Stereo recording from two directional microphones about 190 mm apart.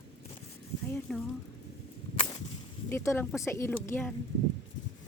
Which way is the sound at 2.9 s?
15° left (ahead or behind).